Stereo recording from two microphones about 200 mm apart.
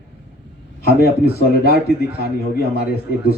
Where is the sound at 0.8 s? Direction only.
50° left (ahead or behind).